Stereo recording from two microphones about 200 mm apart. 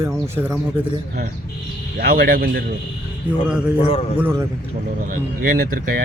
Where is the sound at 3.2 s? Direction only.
5° right (ahead or behind).